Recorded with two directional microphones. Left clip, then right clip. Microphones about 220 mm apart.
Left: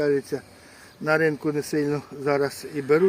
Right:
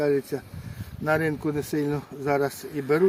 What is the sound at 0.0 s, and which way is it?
Speech, 25° right (ahead or behind).